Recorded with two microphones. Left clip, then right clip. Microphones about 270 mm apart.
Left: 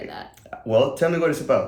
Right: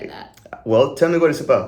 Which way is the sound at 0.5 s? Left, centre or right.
Centre.